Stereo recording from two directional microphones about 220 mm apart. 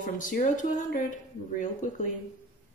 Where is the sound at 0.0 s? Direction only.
35° left (ahead or behind).